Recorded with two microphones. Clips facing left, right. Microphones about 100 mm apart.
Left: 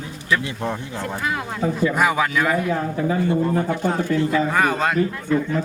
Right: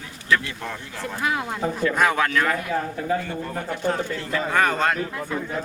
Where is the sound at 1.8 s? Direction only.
10° left (ahead or behind).